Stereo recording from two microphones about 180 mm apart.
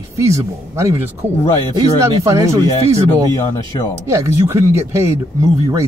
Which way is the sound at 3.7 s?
25° left (ahead or behind).